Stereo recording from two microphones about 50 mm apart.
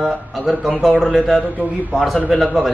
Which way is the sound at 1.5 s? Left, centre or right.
Right.